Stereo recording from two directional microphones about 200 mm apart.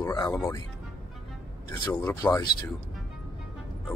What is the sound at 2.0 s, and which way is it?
Speech, 15° left (ahead or behind).